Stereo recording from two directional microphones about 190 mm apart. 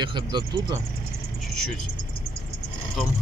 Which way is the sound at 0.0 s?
25° right (ahead or behind).